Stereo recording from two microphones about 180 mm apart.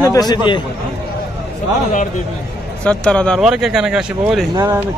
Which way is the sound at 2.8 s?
5° left (ahead or behind).